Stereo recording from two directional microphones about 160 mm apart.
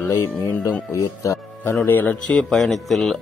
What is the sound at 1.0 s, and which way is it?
Speech, 20° left (ahead or behind).